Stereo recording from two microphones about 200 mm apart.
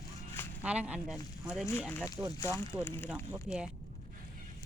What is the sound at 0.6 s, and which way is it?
Speech, 5° right (ahead or behind).